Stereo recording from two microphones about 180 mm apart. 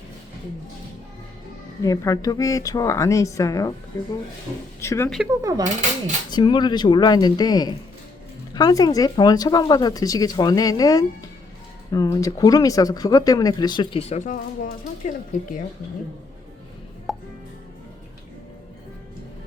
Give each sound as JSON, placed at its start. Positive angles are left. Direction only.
{"t": 1.8, "sound": "speech", "side_deg": 20}
{"t": 4.8, "sound": "speech", "side_deg": 15}
{"t": 5.0, "sound": "speech", "side_deg": 0}
{"t": 5.4, "sound": "speech", "side_deg": -20}
{"t": 6.3, "sound": "speech", "side_deg": 25}
{"t": 14.1, "sound": "speech", "side_deg": 45}
{"t": 17.1, "sound": "music", "side_deg": 0}